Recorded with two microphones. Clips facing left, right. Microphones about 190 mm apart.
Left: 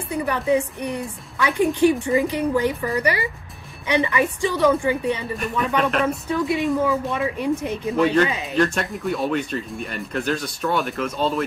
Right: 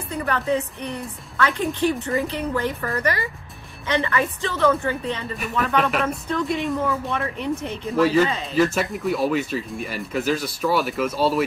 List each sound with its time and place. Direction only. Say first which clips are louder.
0.1 s speech: left 3 dB; 15° left (ahead or behind)
5.8 s speech: left 1 dB; 5° right (ahead or behind)
6.0 s speech: left 2 dB; 10° left (ahead or behind)
7.9 s speech: right 1 dB; 5° right (ahead or behind)